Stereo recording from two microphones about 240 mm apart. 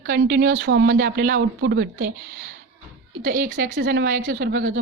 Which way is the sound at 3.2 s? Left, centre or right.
Right.